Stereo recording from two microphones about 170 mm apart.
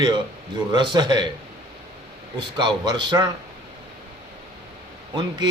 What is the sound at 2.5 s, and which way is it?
Speech, 25° right (ahead or behind).